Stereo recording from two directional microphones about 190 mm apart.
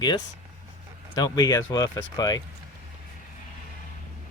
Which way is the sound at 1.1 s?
20° left (ahead or behind).